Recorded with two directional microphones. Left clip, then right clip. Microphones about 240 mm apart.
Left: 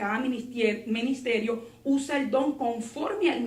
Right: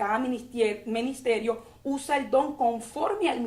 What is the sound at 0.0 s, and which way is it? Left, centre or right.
A woman's voice, right.